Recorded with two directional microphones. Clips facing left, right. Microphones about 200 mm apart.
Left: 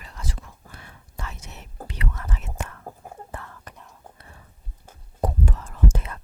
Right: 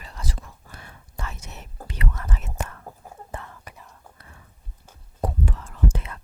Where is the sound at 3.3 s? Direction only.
20° right (ahead or behind).